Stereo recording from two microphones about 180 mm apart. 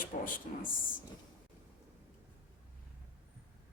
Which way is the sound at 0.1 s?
50° left (ahead or behind).